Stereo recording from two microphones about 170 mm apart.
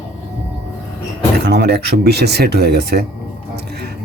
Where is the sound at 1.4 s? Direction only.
75° right (ahead or behind).